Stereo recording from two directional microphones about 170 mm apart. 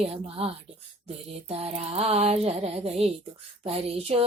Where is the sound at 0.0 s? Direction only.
35° right (ahead or behind).